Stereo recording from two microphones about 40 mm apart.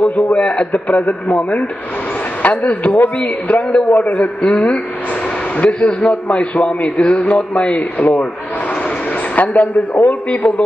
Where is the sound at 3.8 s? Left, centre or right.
Left.